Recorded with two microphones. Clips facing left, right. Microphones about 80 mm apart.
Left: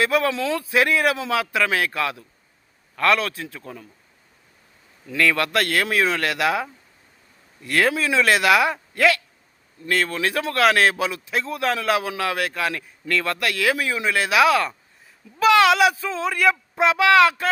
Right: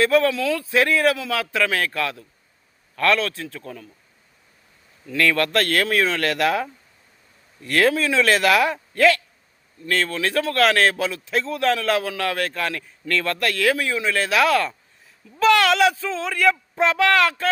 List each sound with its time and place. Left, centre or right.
0.0 s speech: centre
5.1 s speech: centre
7.9 s speech: centre
9.8 s speech: left